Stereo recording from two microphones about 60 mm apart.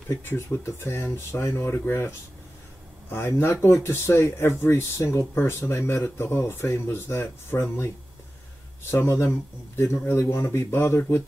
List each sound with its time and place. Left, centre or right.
0.2 s speech: left
8.9 s speech: left